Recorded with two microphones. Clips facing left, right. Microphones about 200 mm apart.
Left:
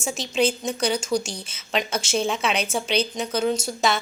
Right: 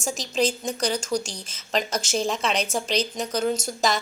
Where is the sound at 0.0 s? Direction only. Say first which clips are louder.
Left 2 dB; centre (ahead or behind).